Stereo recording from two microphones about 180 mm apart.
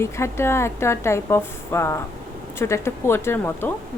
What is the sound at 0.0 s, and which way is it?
A woman's voice, 15° left (ahead or behind).